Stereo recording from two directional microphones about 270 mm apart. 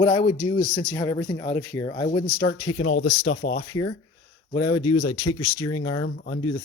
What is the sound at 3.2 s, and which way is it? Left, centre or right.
Speech, left.